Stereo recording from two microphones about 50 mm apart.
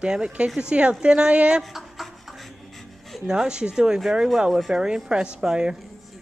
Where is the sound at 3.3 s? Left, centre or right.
Centre.